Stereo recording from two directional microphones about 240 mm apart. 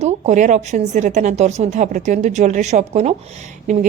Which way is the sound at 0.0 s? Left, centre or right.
Right.